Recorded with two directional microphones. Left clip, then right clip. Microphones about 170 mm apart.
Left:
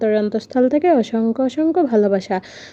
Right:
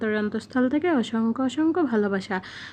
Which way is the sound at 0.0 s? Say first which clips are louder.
Left 9 dB; 20° left (ahead or behind).